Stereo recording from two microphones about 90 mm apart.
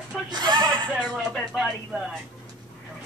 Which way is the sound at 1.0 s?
5° right (ahead or behind).